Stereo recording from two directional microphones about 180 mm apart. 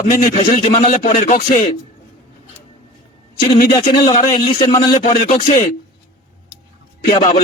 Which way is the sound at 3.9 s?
20° left (ahead or behind).